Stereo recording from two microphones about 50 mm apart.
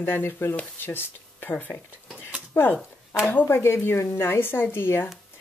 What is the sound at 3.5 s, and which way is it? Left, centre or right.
Speech, left.